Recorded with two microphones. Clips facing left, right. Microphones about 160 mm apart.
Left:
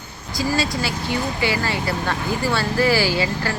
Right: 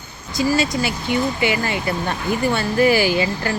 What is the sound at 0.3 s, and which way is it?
Speech, 20° right (ahead or behind).